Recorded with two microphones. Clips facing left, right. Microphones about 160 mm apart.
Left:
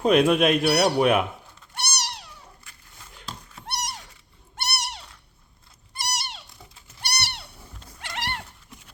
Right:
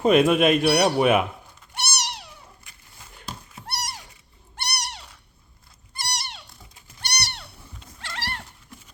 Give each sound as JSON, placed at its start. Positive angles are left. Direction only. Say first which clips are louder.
{"t": 0.0, "sound": "speech", "louder": "right 1 dB", "side_deg": 0}
{"t": 1.7, "sound": "cat", "louder": "right 1 dB", "side_deg": -5}
{"t": 3.7, "sound": "cat", "louder": "left 1 dB", "side_deg": 0}
{"t": 6.1, "sound": "cat", "louder": "left 1 dB", "side_deg": 0}
{"t": 8.0, "sound": "dog", "louder": "left 2 dB", "side_deg": 15}